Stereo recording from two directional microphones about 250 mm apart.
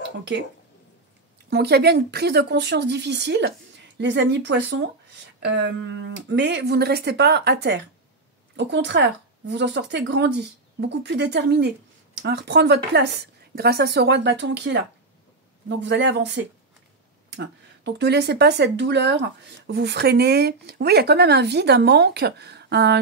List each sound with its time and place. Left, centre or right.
1.5 s speech: right